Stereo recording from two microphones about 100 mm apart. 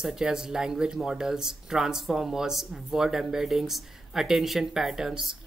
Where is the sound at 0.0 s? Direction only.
5° right (ahead or behind).